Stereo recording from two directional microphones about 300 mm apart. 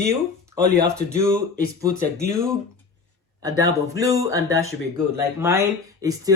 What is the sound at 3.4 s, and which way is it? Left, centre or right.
Speech, centre.